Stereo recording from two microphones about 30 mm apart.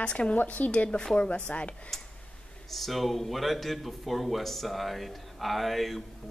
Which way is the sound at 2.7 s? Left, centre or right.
Centre.